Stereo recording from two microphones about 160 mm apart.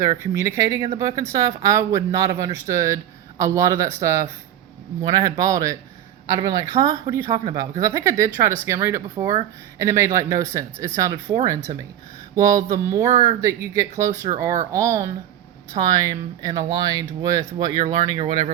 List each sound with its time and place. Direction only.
0.0 s speech: 20° right (ahead or behind)